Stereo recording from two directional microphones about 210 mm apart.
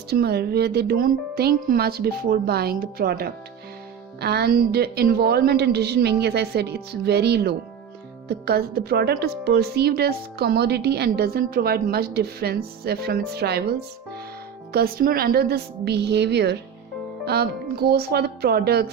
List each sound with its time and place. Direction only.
0.1 s a woman's voice: 50° right (ahead or behind)
14.7 s a woman's voice: 45° right (ahead or behind)